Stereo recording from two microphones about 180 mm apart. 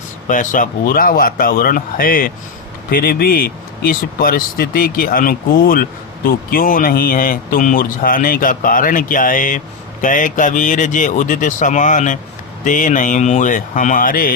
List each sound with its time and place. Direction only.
0.3 s speech: 45° left (ahead or behind)